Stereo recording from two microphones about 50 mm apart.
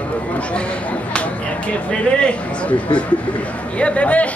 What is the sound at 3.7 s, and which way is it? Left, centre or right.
Speech, left.